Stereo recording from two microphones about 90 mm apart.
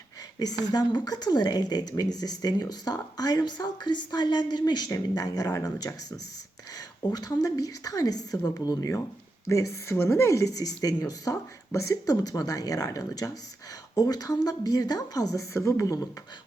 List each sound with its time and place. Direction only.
0.3 s speech: 45° left (ahead or behind)
9.5 s speech: 30° left (ahead or behind)